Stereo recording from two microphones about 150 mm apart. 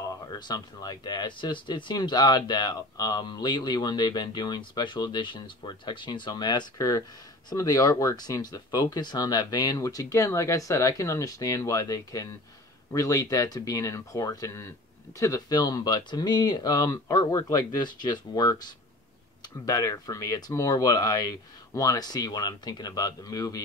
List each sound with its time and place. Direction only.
0.1 s speech: 30° left (ahead or behind)